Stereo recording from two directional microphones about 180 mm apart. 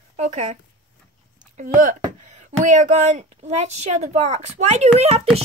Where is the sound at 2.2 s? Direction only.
40° right (ahead or behind).